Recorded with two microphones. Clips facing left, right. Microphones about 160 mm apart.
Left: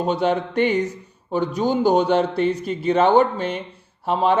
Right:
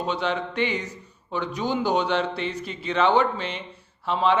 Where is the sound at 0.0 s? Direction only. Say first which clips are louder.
Left 6 dB; 45° left (ahead or behind).